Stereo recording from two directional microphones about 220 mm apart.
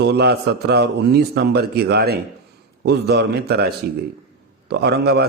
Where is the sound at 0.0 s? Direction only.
50° right (ahead or behind).